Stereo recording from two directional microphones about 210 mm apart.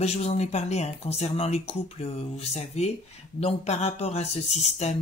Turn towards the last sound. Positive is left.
turn(degrees=30)  # may be behind; listen again after turning